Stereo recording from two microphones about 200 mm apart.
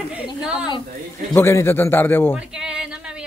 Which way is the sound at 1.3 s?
15° left (ahead or behind).